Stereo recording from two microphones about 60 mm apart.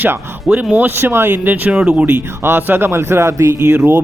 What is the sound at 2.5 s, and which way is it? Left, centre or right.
A man's voice, right.